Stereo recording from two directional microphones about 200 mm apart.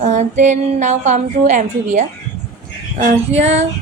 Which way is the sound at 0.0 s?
35° right (ahead or behind).